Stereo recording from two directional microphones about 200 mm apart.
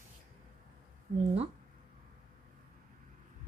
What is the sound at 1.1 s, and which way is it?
Speech, 35° right (ahead or behind).